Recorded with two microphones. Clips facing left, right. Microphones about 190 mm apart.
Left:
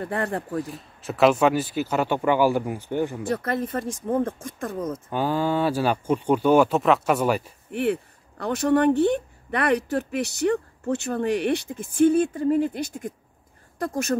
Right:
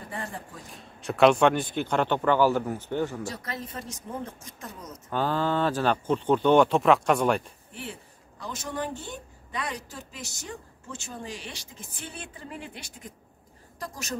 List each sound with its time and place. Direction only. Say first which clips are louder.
0.0 s a woman's voice: left 10 dB; 65° left (ahead or behind)
0.7 s speech: left 1 dB; centre (ahead or behind)
3.3 s speech: left 11 dB; 55° left (ahead or behind)
5.1 s speech: left 2 dB; 10° left (ahead or behind)
7.7 s a woman's voice: left 16 dB; 65° left (ahead or behind)